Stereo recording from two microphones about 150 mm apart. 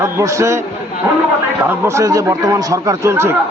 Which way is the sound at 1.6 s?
15° right (ahead or behind).